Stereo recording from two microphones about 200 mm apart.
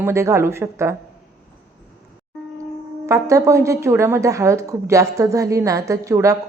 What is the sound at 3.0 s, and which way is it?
Speech, 15° right (ahead or behind).